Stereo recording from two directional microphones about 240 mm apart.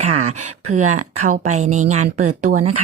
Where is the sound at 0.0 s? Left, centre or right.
Right.